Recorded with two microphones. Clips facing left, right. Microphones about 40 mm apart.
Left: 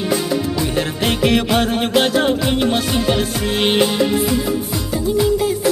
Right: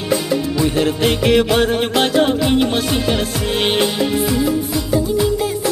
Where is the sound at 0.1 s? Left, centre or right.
Centre.